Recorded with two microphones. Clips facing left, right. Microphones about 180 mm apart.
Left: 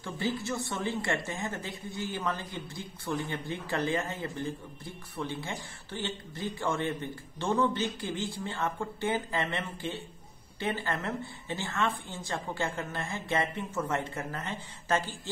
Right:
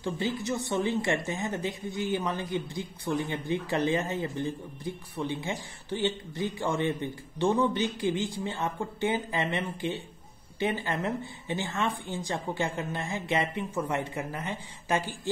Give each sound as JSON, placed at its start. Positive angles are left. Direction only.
{"t": 0.0, "sound": "a woman's voice", "side_deg": -20}